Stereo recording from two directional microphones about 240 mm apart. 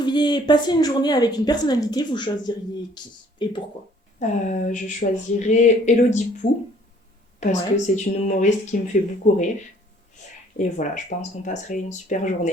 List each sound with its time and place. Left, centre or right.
0.0 s speech: centre
4.2 s speech: left
10.6 s speech: left